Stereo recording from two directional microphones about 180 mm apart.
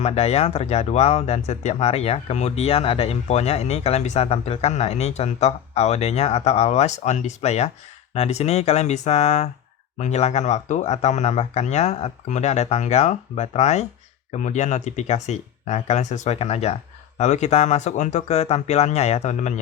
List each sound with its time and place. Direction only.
0.0 s speech: 35° left (ahead or behind)